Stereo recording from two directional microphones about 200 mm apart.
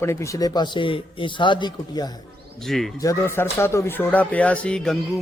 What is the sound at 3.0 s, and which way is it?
Speech, 15° left (ahead or behind).